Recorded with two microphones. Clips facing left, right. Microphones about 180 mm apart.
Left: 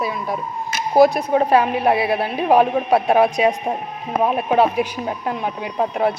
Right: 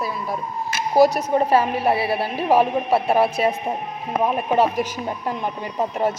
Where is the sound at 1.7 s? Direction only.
15° left (ahead or behind).